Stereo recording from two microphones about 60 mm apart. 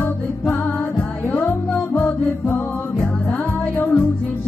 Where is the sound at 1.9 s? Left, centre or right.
Left.